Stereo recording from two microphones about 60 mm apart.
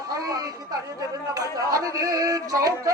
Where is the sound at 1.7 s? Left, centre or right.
Right.